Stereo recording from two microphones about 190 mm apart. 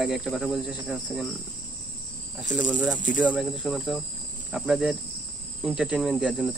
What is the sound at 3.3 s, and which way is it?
Speech, centre (ahead or behind).